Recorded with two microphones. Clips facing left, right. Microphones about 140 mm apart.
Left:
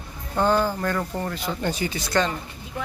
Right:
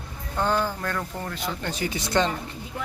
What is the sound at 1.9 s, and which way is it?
Speech, 20° right (ahead or behind).